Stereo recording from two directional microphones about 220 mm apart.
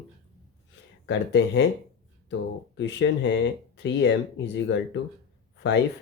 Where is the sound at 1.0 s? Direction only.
50° left (ahead or behind).